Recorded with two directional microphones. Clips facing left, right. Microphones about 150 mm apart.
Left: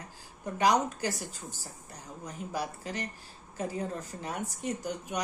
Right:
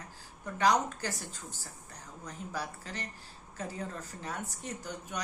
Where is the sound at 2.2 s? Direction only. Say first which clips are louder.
Left 3 dB; 15° left (ahead or behind).